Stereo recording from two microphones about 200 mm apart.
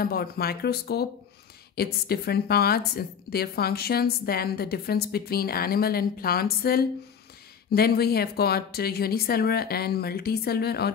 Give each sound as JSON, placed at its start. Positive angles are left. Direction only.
{"t": 0.0, "sound": "a woman's voice", "side_deg": 50}